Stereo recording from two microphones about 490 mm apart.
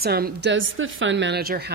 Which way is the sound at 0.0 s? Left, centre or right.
Centre.